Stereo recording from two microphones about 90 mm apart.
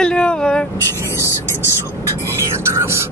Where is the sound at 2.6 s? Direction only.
30° right (ahead or behind).